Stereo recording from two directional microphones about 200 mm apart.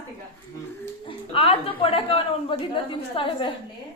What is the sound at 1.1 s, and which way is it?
A woman's voice, 25° left (ahead or behind).